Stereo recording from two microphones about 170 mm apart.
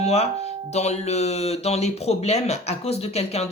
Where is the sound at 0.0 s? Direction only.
40° left (ahead or behind).